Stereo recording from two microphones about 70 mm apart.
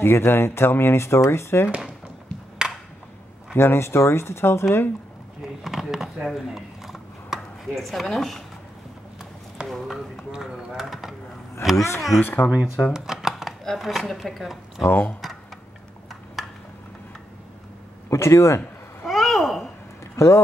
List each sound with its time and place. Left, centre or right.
0.0 s speech: left
2.6 s a sound: centre
3.5 s speech: left
5.6 s a sound: centre
9.7 s speech: centre
10.3 s speech: centre
11.7 s speech: left
12.2 s speech: left
12.9 s speech: centre
14.9 s speech: left
18.1 s speech: left
19.0 s a sound: centre
20.2 s speech: left